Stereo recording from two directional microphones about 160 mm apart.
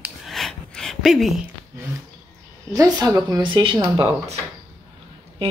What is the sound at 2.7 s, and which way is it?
A woman's voice, 20° right (ahead or behind).